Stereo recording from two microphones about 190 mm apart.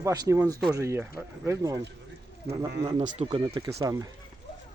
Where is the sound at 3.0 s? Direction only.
30° right (ahead or behind).